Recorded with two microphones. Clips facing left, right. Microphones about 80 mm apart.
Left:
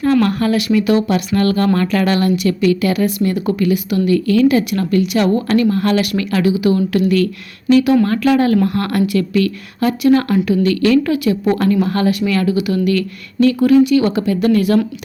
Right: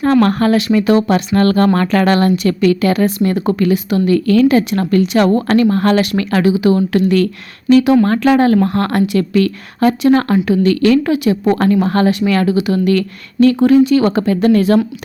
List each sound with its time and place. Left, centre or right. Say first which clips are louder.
0.0 s a woman's voice: right 2 dB; right
11.1 s a woman's voice: right 2 dB; right
11.4 s a woman's voice: right 2 dB; right
12.5 s a woman's voice: right 2 dB; right